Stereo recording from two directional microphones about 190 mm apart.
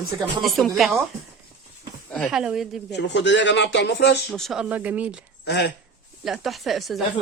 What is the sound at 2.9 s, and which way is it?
Speech, 70° left (ahead or behind).